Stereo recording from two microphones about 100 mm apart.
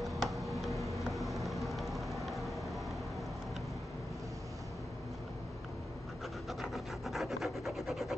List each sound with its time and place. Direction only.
0.0 s tick-tock: centre (ahead or behind)
0.7 s vehicle: centre (ahead or behind)
6.6 s rub: centre (ahead or behind)